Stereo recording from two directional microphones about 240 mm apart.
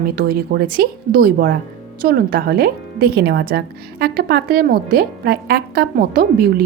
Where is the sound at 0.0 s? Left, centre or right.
Right.